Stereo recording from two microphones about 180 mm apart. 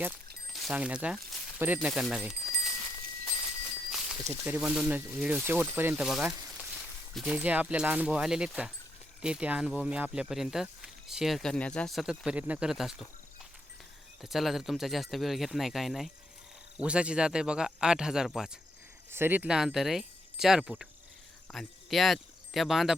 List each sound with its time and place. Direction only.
0.5 s speech: 5° right (ahead or behind)
3.9 s speech: 5° right (ahead or behind)
14.2 s speech: centre (ahead or behind)